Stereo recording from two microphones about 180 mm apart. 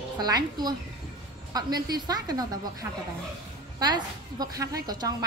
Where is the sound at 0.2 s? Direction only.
20° right (ahead or behind).